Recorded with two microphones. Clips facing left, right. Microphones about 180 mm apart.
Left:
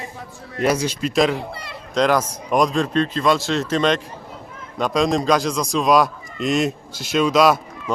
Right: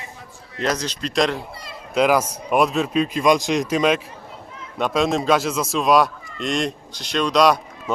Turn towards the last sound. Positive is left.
turn(degrees=5)  # may be behind; listen again after turning